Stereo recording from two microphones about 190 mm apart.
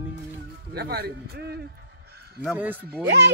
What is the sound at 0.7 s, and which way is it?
Speech, 55° right (ahead or behind).